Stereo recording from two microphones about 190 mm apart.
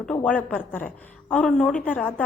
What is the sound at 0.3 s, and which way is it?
A woman's voice, 10° left (ahead or behind).